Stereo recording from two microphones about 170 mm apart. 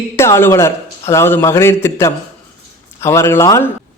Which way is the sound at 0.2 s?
15° left (ahead or behind).